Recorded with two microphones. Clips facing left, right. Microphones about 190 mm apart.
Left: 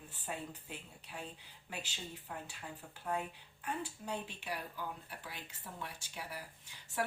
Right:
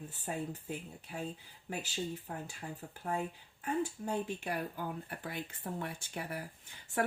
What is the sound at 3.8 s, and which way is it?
Speech, 45° right (ahead or behind).